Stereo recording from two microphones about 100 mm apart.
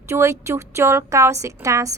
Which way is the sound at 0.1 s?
30° right (ahead or behind).